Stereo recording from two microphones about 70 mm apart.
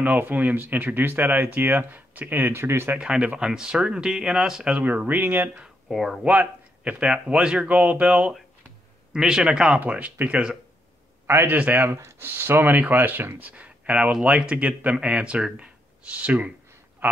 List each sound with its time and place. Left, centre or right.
0.0 s speech: right
3.0 s speech: centre
4.8 s speech: right
5.9 s speech: centre
6.2 s speech: centre
11.2 s a man's voice: right
11.5 s speech: right
11.9 s speech: right; by 16.5 s centre
17.0 s a sound: right